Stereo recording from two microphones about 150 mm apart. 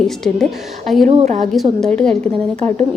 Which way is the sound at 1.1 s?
45° right (ahead or behind).